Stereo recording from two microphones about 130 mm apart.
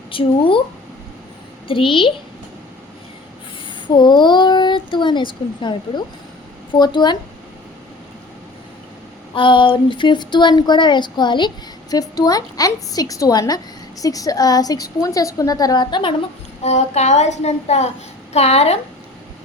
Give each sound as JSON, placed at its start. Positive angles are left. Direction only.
{"t": 0.1, "sound": "a woman's voice", "side_deg": 45}
{"t": 1.6, "sound": "a woman's voice", "side_deg": 45}
{"t": 3.8, "sound": "speech", "side_deg": 35}
{"t": 9.3, "sound": "a woman's voice", "side_deg": 40}
{"t": 16.6, "sound": "a child's voice", "side_deg": 60}